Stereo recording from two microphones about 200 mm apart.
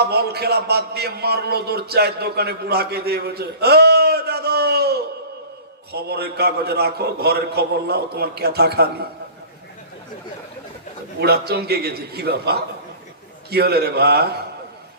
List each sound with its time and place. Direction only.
0.1 s a man's voice: 55° right (ahead or behind)
11.2 s a man's voice: 55° right (ahead or behind)